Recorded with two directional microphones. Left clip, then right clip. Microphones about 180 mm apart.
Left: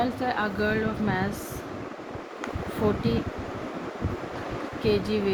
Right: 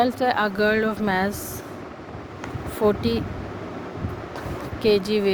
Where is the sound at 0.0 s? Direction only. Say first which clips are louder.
Right 6 dB; 65° right (ahead or behind).